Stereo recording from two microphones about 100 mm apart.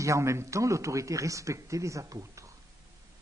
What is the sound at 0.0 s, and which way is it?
A man's voice, 30° right (ahead or behind).